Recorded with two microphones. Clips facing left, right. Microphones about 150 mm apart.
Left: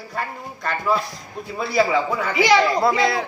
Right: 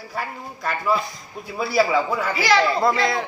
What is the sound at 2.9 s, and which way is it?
Speech, centre (ahead or behind).